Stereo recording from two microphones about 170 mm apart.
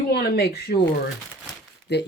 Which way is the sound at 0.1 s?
70° left (ahead or behind).